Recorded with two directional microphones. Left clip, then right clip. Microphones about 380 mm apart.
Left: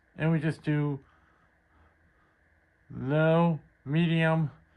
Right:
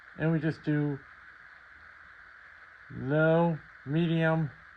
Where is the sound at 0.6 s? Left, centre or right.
Left.